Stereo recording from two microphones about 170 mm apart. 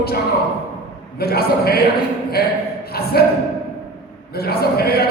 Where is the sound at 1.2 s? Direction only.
65° left (ahead or behind).